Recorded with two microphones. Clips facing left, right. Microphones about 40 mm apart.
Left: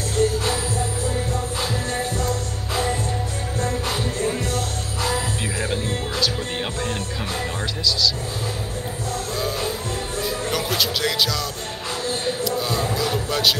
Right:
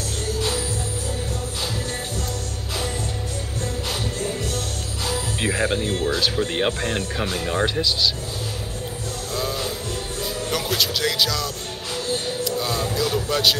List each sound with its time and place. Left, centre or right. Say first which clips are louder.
2.2 s music: left 4 dB; left
4.5 s music: left 3 dB; left
5.4 s music: right 3 dB; right
6.3 s speech: right 4 dB; right
9.3 s music: right 1 dB; centre
10.5 s speech: right 1 dB; centre
12.4 s a sound: even; centre
12.9 s a man's voice: right 1 dB; centre